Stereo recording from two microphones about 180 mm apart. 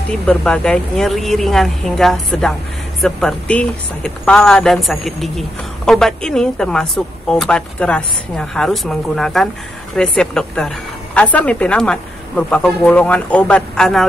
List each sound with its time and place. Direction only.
0.1 s a woman's voice: 5° left (ahead or behind)